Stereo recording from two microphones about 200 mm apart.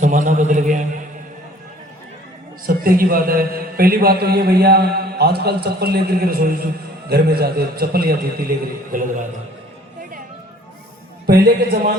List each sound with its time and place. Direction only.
0.0 s a man's voice: 40° right (ahead or behind)
2.6 s a man's voice: 45° right (ahead or behind)
11.3 s a man's voice: 50° right (ahead or behind)